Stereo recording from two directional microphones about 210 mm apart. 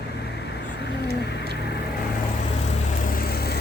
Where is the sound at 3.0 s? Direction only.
45° left (ahead or behind).